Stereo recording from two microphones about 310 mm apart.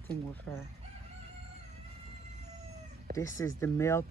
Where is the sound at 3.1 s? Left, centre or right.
Centre.